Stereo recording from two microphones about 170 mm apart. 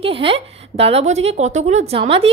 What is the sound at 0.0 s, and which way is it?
A woman's voice, 35° right (ahead or behind).